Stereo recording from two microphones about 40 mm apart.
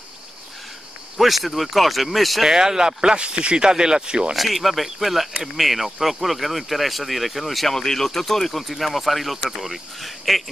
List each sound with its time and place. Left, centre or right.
1.1 s speech: centre
2.4 s speech: centre
4.4 s speech: centre